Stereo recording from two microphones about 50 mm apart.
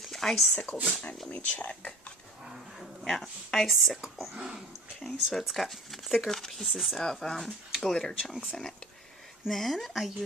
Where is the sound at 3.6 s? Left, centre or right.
Centre.